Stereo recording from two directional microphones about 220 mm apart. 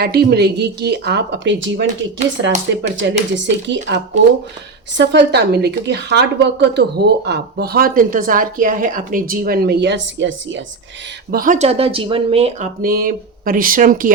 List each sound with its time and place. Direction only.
0.0 s a woman's voice: 45° right (ahead or behind)
11.3 s speech: 40° right (ahead or behind)
12.8 s speech: 40° right (ahead or behind)